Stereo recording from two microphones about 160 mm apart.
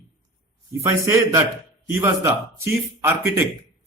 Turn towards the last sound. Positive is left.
turn(degrees=-15)  # may be behind; listen again after turning